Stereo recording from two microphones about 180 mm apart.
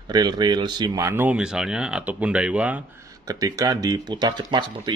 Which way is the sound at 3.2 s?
20° right (ahead or behind).